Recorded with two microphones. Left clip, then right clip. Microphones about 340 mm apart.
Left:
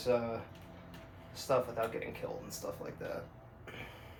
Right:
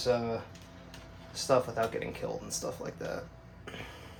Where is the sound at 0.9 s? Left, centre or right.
Right.